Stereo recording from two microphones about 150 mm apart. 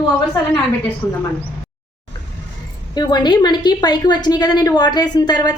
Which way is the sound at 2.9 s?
30° left (ahead or behind).